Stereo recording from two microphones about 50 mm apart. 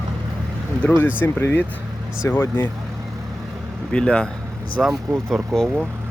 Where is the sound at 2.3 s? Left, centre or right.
Left.